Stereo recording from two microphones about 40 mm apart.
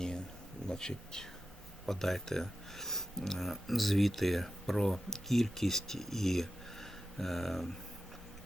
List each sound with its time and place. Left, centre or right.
0.7 s speech: centre